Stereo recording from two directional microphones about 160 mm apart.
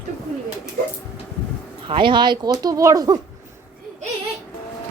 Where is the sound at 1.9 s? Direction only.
30° right (ahead or behind).